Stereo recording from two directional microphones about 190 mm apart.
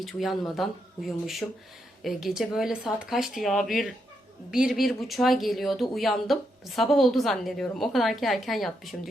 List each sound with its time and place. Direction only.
0.0 s speech: centre (ahead or behind)